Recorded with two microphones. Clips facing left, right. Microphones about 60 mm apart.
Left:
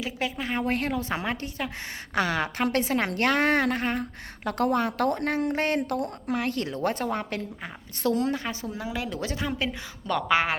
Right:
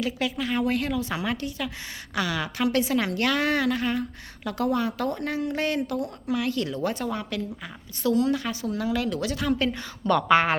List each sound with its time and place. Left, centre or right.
0.2 s a woman's voice: left
8.7 s speech: centre
10.1 s speech: centre